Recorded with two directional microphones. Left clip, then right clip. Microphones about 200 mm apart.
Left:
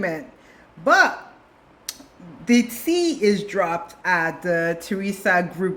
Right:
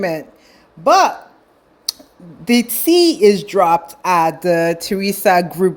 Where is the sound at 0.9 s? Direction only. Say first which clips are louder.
Right 5 dB; 30° right (ahead or behind).